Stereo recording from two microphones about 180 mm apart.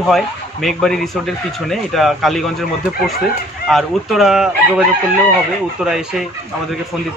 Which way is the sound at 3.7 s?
Centre (ahead or behind).